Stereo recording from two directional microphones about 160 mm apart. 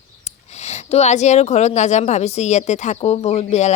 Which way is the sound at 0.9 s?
45° left (ahead or behind).